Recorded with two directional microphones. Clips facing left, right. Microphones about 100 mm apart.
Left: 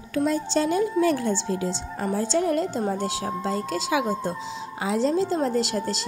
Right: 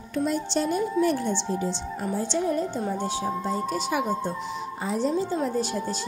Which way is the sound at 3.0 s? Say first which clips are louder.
Even; 90° left.